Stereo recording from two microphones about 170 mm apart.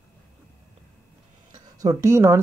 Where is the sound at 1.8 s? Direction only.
15° right (ahead or behind).